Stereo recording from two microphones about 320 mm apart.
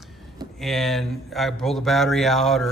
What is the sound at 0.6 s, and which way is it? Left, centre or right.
Speech, centre.